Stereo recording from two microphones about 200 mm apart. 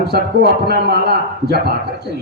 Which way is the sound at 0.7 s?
55° right (ahead or behind).